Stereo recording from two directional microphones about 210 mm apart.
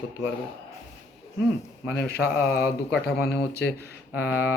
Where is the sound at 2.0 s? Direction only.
50° left (ahead or behind).